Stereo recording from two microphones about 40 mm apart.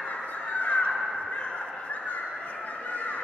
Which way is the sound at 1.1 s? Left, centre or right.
Left.